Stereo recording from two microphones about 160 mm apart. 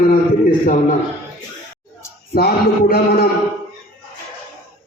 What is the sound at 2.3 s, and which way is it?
Speech, 75° left (ahead or behind).